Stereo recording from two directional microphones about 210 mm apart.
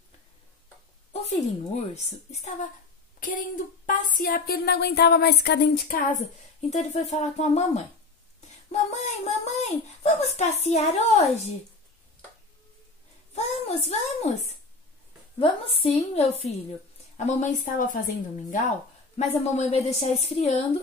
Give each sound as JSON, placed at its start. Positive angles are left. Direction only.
{"t": 1.1, "sound": "a child's voice", "side_deg": 30}
{"t": 13.3, "sound": "a sound", "side_deg": 30}
{"t": 15.3, "sound": "a woman's voice", "side_deg": 25}